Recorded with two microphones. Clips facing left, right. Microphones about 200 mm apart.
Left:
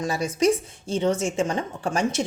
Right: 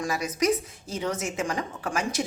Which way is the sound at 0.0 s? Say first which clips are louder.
Left 4 dB; 30° left (ahead or behind).